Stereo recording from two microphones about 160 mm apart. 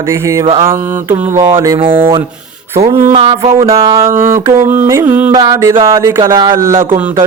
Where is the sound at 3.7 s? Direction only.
20° right (ahead or behind).